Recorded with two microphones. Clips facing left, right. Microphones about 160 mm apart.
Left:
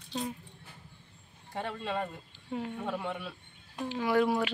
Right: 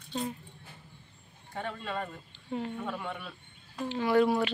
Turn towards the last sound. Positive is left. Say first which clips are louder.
# right 2 dB
turn(degrees=5)  # may be behind; listen again after turning